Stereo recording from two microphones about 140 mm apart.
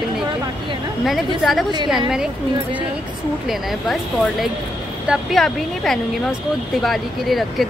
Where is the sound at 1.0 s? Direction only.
Centre (ahead or behind).